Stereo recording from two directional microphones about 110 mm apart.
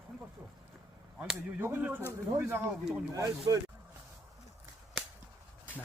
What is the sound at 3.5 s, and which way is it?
Speech, 35° right (ahead or behind).